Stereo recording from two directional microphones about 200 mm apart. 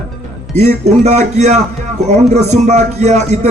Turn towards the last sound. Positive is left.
turn(degrees=-35)  # may be behind; listen again after turning